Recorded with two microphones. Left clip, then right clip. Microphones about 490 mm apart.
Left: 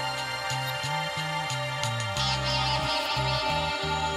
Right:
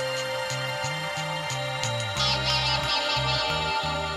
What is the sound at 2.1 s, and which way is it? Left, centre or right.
Music, left.